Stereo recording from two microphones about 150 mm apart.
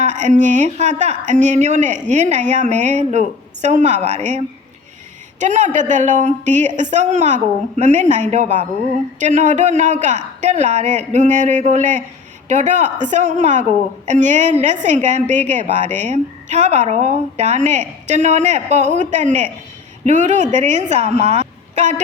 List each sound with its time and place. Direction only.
0.0 s a woman's voice: 50° right (ahead or behind)